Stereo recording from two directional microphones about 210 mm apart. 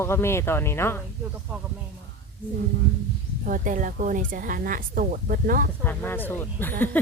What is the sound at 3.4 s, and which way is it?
Speech, 40° right (ahead or behind).